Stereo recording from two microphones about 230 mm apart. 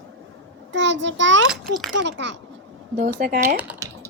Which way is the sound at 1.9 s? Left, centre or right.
Right.